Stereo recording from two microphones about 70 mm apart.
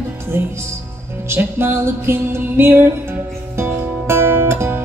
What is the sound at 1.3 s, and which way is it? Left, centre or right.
Music, right.